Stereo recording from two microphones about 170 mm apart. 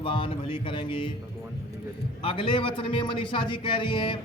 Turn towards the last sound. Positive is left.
turn(degrees=30)  # may be behind; listen again after turning